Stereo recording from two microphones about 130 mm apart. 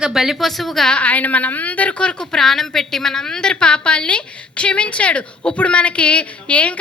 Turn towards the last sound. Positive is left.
turn(degrees=10)  # may be behind; listen again after turning